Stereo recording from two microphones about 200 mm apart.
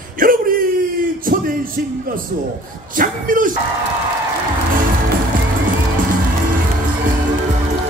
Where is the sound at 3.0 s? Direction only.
45° right (ahead or behind).